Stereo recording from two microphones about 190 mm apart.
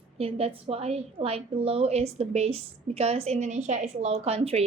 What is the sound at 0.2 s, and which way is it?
A woman's voice, 30° right (ahead or behind).